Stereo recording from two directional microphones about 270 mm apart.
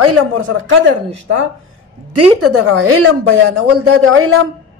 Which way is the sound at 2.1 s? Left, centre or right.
Right.